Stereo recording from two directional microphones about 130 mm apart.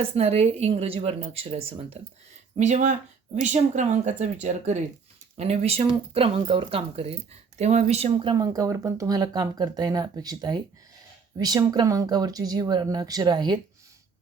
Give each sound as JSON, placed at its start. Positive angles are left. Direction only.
{"t": 0.0, "sound": "speech", "side_deg": -50}
{"t": 2.6, "sound": "speech", "side_deg": -65}
{"t": 5.4, "sound": "speech", "side_deg": -55}
{"t": 8.3, "sound": "speech", "side_deg": -30}